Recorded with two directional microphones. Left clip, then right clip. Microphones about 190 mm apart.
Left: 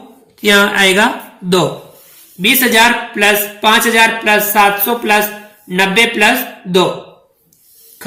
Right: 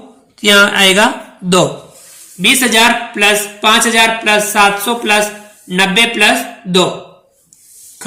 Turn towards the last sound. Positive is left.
turn(degrees=-10)  # may be behind; listen again after turning